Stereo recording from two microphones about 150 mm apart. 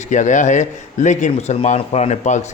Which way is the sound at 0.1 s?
55° left (ahead or behind).